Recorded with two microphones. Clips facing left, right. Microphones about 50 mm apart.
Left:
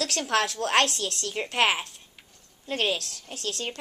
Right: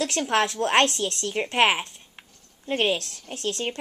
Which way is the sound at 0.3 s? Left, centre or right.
Right.